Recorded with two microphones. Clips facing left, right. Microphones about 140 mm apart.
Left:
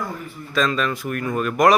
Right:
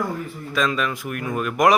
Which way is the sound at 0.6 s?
10° right (ahead or behind).